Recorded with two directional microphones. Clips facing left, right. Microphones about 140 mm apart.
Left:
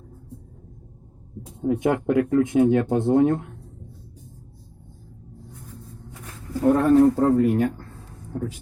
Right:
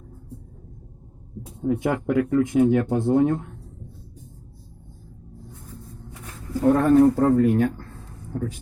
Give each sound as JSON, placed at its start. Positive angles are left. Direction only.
{"t": 1.6, "sound": "speech", "side_deg": 20}
{"t": 6.6, "sound": "speech", "side_deg": 0}